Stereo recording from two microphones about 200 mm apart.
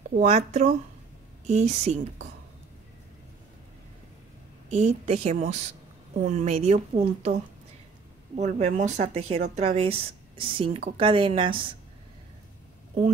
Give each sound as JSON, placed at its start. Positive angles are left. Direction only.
{"t": 0.1, "sound": "a woman's voice", "side_deg": -30}
{"t": 4.6, "sound": "a woman's voice", "side_deg": -30}
{"t": 8.4, "sound": "a woman's voice", "side_deg": -35}